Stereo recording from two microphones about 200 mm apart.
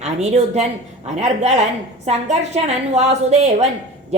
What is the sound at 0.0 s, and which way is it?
A woman's voice, 35° right (ahead or behind).